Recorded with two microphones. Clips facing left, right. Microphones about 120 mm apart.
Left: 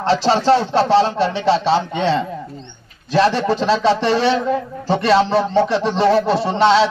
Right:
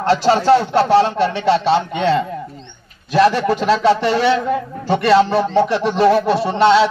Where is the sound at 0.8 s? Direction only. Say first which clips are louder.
Right 1 dB; 30° left (ahead or behind).